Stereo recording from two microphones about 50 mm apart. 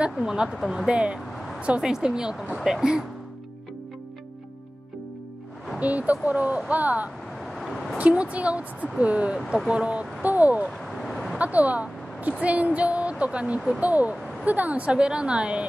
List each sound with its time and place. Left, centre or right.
0.2 s a woman's voice: centre
0.8 s a woman's voice: centre
5.8 s speech: right
7.4 s a sound: centre
8.0 s speech: right
10.9 s vehicle: centre
11.3 s speech: right